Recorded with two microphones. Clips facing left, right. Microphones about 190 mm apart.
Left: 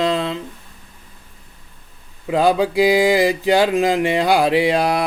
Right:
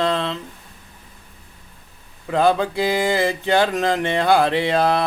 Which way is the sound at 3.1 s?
15° left (ahead or behind).